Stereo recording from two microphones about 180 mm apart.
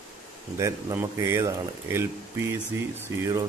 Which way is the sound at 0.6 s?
15° right (ahead or behind).